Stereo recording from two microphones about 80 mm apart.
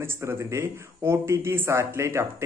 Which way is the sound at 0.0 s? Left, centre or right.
Right.